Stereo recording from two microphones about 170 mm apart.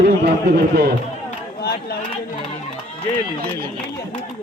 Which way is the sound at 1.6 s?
65° left (ahead or behind).